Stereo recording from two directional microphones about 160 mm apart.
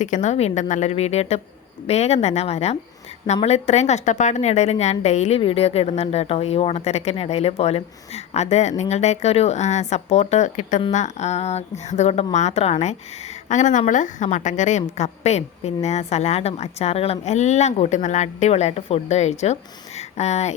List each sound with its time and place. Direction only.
0.0 s speech: 50° left (ahead or behind)